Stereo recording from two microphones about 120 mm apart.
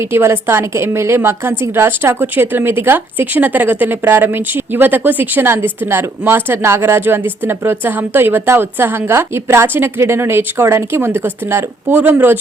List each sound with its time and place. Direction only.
0.0 s a woman's voice: 20° right (ahead or behind)